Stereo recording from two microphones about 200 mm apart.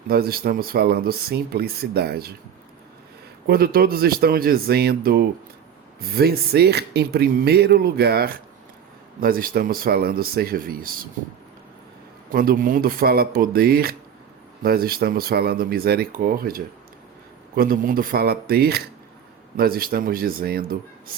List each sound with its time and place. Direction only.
0.1 s speech: 50° right (ahead or behind)
3.4 s speech: 50° right (ahead or behind)
12.3 s speech: 45° right (ahead or behind)